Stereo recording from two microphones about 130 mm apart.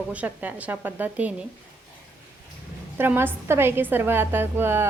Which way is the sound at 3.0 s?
15° right (ahead or behind).